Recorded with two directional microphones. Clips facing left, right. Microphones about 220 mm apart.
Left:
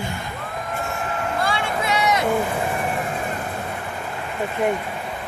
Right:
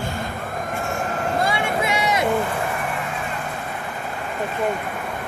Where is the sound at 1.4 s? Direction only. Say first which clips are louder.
Right 2 dB; 20° right (ahead or behind).